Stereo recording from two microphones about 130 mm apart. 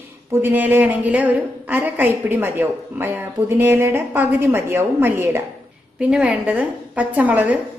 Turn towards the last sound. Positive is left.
turn(degrees=-10)  # may be behind; listen again after turning